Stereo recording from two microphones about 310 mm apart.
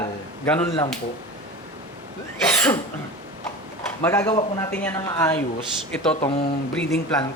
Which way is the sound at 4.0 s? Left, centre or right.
Centre.